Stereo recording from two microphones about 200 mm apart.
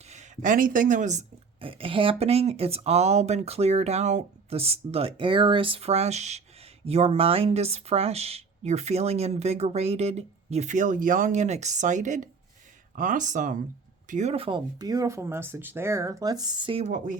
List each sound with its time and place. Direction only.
0.1 s speech: 40° right (ahead or behind)
1.6 s speech: 25° right (ahead or behind)
16.8 s speech: 40° right (ahead or behind)